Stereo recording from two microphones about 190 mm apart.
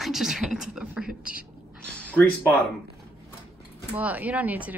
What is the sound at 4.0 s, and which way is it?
Speech, 10° right (ahead or behind).